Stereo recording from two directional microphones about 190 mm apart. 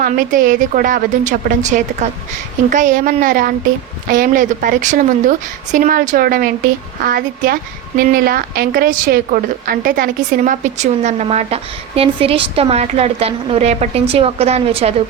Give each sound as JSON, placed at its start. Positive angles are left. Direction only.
{"t": 0.0, "sound": "a woman's voice", "side_deg": -45}